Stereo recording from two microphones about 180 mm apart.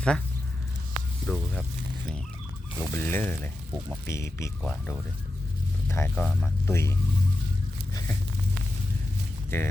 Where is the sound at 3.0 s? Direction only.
10° left (ahead or behind).